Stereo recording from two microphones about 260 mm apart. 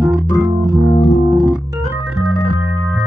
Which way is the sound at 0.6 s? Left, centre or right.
Centre.